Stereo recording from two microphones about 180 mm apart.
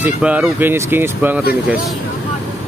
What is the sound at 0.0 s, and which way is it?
Speech, 10° right (ahead or behind).